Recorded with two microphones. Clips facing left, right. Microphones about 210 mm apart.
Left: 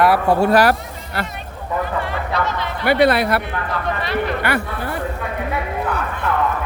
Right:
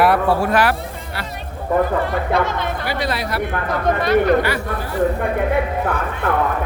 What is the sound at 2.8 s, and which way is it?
Speech, 60° left (ahead or behind).